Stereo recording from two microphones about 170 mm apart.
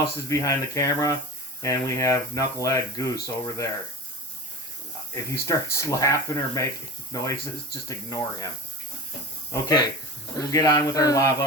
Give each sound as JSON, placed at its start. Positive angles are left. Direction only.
{"t": 0.0, "sound": "speech", "side_deg": 20}
{"t": 5.3, "sound": "speech", "side_deg": 15}
{"t": 9.5, "sound": "speech", "side_deg": 25}